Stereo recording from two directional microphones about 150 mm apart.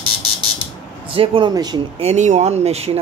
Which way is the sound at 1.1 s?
35° right (ahead or behind).